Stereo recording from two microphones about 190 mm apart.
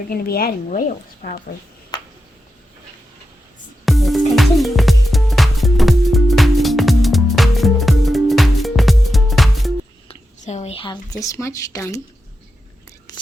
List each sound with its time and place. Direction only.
0.1 s a woman's voice: 50° left (ahead or behind)
1.9 s a sound: 20° left (ahead or behind)
3.8 s music: centre (ahead or behind)
10.1 s a woman's voice: 35° left (ahead or behind); by 12.0 s 15° left (ahead or behind)